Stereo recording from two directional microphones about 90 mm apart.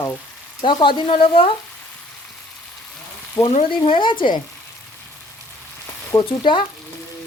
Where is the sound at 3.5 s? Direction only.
90° left; by 4.4 s 60° left (ahead or behind).